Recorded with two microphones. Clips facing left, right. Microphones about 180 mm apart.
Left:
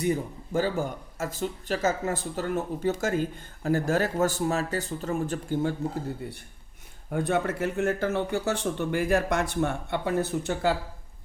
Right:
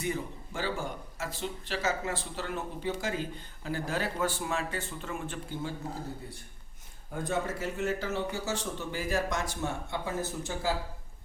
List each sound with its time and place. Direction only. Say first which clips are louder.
0.0 s speech: left 7 dB; 40° left (ahead or behind)
6.2 s speech: left 7 dB; 65° left (ahead or behind)